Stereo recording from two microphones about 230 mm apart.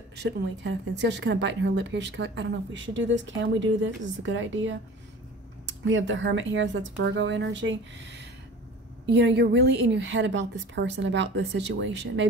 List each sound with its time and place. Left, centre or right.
0.1 s a woman's voice: right